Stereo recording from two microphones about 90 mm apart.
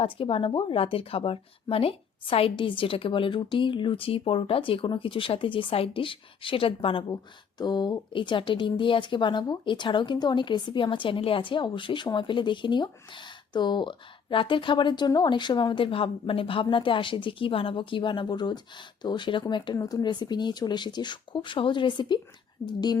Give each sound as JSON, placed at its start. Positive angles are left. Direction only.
{"t": 0.0, "sound": "a woman's voice", "side_deg": 80}
{"t": 7.6, "sound": "speech", "side_deg": 55}
{"t": 19.7, "sound": "speech", "side_deg": 45}